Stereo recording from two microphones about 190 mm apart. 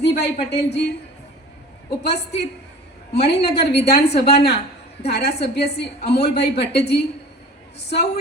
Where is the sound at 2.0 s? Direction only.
60° left (ahead or behind).